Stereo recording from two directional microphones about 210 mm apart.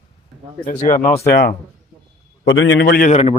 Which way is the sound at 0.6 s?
35° left (ahead or behind).